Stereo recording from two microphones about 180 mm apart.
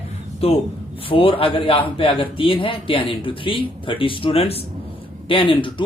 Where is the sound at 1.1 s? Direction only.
30° left (ahead or behind).